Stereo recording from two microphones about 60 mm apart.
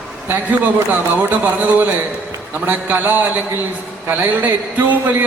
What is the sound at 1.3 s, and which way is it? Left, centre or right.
A man's voice, right.